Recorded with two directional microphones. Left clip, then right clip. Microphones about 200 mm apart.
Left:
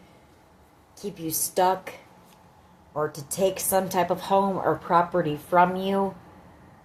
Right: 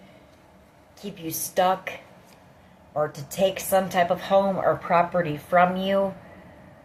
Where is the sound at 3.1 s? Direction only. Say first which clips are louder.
Right 1 dB; 50° left (ahead or behind).